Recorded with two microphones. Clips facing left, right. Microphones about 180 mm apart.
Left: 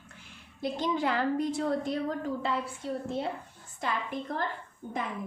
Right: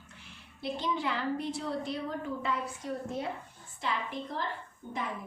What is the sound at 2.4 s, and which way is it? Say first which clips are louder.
Speech: left 2 dB; 30° left (ahead or behind).